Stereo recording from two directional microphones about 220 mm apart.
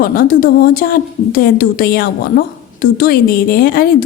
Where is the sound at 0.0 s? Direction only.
40° left (ahead or behind).